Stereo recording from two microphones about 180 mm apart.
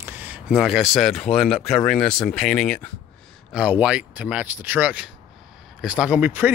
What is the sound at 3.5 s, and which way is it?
Speech, 5° right (ahead or behind).